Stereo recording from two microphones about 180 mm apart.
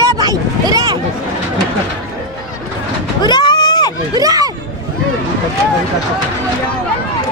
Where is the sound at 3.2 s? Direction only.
25° left (ahead or behind).